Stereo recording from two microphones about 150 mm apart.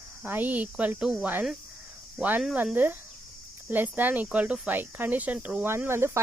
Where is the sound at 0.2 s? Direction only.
10° right (ahead or behind).